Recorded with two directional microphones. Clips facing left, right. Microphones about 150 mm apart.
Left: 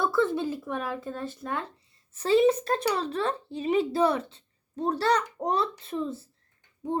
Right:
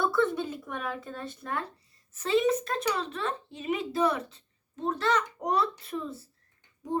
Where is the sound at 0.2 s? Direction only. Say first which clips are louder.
Left 2 dB; 25° left (ahead or behind).